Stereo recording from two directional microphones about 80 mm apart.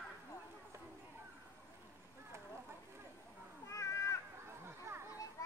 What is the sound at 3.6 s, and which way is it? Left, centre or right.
Cat, left.